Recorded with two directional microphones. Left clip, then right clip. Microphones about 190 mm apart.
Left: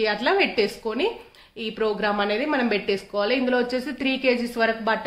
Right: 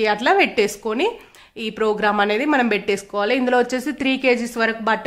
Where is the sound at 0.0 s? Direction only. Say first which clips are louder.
Right 5 dB; 40° right (ahead or behind).